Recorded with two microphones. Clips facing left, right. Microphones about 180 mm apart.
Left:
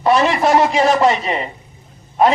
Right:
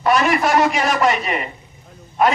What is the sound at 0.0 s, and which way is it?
A man's voice, 25° left (ahead or behind).